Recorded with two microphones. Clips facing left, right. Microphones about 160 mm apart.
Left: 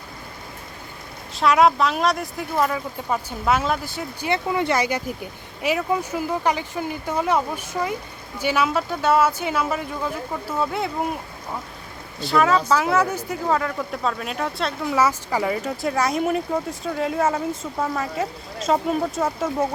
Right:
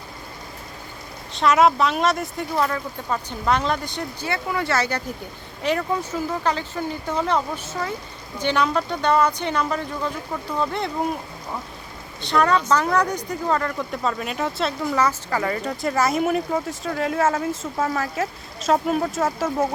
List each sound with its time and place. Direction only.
1.4 s speech: centre (ahead or behind)
4.3 s speech: 20° left (ahead or behind); by 10.9 s 5° left (ahead or behind)
12.2 s speech: 5° left (ahead or behind)
14.9 s speech: 10° left (ahead or behind)